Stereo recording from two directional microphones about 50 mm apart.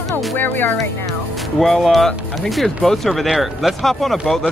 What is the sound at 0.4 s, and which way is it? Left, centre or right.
Speech, left.